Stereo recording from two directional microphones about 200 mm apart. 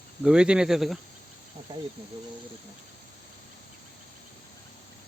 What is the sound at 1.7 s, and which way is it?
Speech, 20° right (ahead or behind).